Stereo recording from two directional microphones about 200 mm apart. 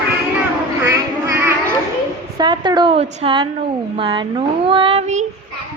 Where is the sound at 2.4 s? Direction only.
20° right (ahead or behind).